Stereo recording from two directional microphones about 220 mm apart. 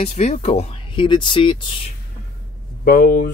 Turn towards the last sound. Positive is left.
turn(degrees=35)  # may be behind; listen again after turning